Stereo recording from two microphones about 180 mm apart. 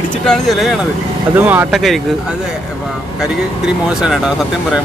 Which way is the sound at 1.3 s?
10° right (ahead or behind).